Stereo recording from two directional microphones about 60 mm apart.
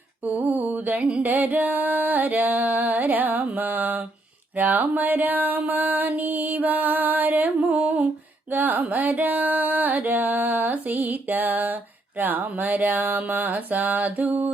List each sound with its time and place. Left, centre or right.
0.3 s mantra: right
1.2 s music: right
4.5 s mantra: right
8.5 s music: right